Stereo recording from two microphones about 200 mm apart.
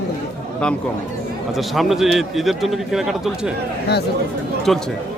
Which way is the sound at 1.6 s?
Centre (ahead or behind).